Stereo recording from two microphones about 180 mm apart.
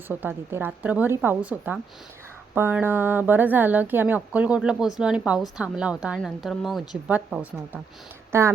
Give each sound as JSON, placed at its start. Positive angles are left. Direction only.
{"t": 0.1, "sound": "a woman's voice", "side_deg": -10}